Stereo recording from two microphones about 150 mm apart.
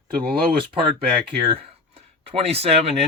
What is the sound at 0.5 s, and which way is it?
Speech, 35° right (ahead or behind).